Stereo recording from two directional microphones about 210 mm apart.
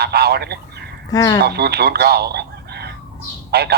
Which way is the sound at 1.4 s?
50° right (ahead or behind).